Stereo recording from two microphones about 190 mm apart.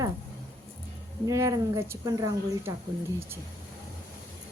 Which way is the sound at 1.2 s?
15° right (ahead or behind).